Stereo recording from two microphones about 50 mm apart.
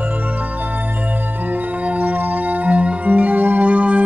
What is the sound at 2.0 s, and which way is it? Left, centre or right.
Music, right.